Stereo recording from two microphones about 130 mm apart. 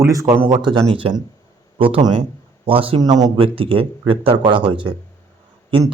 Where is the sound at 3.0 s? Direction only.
30° right (ahead or behind).